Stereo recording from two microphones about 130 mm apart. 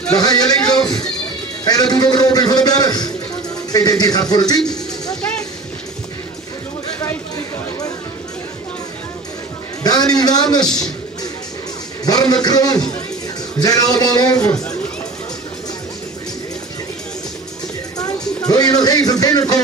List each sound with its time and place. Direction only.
0.2 s a man's voice: 30° left (ahead or behind)
7.0 s a sound: 25° left (ahead or behind)
9.8 s a man's voice: 30° left (ahead or behind)
12.0 s a man's voice: 30° left (ahead or behind)
18.5 s a man's voice: 30° left (ahead or behind)